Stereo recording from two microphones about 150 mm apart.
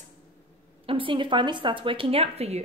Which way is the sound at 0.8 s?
35° right (ahead or behind).